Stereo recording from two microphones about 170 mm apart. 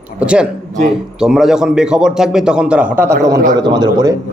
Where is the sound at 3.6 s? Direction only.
25° right (ahead or behind).